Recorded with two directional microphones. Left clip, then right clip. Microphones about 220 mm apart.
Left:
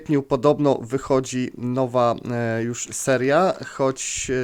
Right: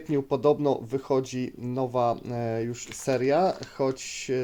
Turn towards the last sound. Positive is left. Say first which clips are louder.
# left 5 dB
turn(degrees=30)  # may be behind; listen again after turning